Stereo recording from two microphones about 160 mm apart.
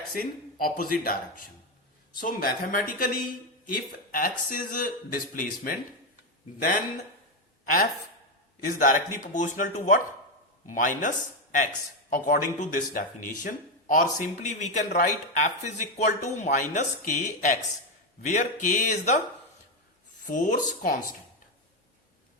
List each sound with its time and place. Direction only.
0.2 s speech: 60° left (ahead or behind)
7.6 s a man's voice: 60° left (ahead or behind)
12.1 s a man's voice: 55° left (ahead or behind)
20.2 s a man's voice: 50° left (ahead or behind)